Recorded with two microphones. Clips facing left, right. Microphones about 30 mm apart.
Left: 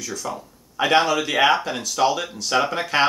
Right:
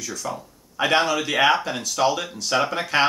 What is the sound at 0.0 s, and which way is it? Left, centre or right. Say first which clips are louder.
Speech: left 1 dB; centre.